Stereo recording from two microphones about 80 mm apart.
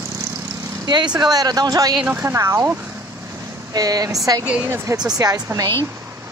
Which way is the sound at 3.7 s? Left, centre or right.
Right.